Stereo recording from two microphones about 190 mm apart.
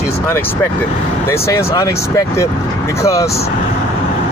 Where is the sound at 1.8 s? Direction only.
15° left (ahead or behind).